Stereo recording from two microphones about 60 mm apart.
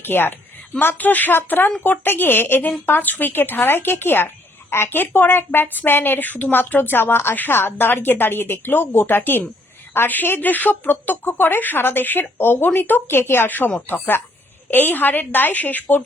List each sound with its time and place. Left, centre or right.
0.0 s a woman's voice: left